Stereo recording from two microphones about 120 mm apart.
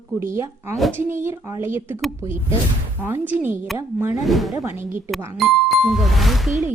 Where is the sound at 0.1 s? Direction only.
20° right (ahead or behind).